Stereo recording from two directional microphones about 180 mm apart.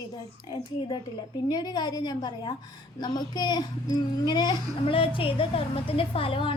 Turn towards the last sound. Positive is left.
turn(degrees=30)  # may be behind; listen again after turning